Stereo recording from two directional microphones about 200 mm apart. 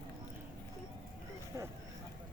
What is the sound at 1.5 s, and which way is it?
Vehicle, 15° right (ahead or behind).